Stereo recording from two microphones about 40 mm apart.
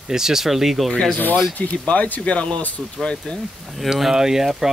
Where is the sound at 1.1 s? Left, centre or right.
Left.